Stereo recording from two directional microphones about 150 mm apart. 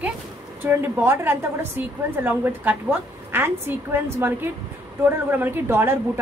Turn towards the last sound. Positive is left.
turn(degrees=-15)  # may be behind; listen again after turning